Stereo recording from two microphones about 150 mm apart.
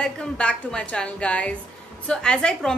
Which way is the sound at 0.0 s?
5° left (ahead or behind).